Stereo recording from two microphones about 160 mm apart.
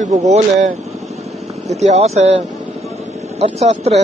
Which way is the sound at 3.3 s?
40° right (ahead or behind).